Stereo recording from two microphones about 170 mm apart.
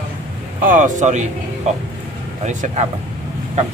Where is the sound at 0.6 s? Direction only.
50° right (ahead or behind).